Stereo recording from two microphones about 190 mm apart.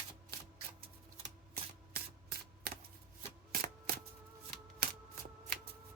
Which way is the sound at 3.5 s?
55° right (ahead or behind).